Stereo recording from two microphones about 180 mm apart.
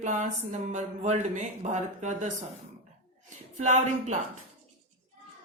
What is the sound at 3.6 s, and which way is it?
Speech, 40° right (ahead or behind).